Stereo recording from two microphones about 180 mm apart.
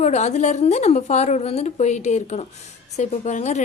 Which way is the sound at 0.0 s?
40° left (ahead or behind).